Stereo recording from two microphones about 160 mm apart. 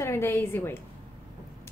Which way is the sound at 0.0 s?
15° left (ahead or behind).